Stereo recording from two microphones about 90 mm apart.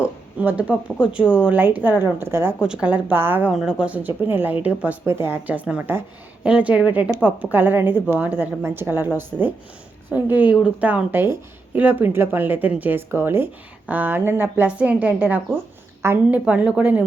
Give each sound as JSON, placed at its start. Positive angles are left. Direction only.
{"t": 0.0, "sound": "speech", "side_deg": -15}
{"t": 2.6, "sound": "speech", "side_deg": -10}
{"t": 3.5, "sound": "speech", "side_deg": -5}
{"t": 5.0, "sound": "speech", "side_deg": -25}
{"t": 9.3, "sound": "speech", "side_deg": 5}
{"t": 10.1, "sound": "a woman's voice", "side_deg": -20}
{"t": 16.5, "sound": "speech", "side_deg": -10}